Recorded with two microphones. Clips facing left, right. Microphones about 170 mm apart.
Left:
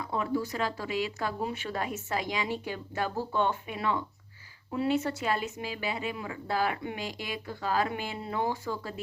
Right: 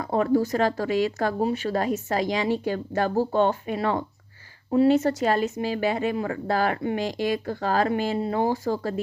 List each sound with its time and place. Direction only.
0.0 s a woman's voice: 45° right (ahead or behind)